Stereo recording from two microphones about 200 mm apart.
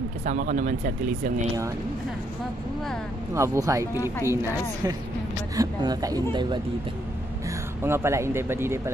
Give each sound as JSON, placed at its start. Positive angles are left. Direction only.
{"t": 0.2, "sound": "speech", "side_deg": -40}
{"t": 3.3, "sound": "speech", "side_deg": -15}
{"t": 7.8, "sound": "speech", "side_deg": -10}